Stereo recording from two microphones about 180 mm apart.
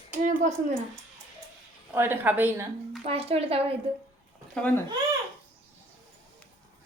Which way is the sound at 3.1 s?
35° right (ahead or behind).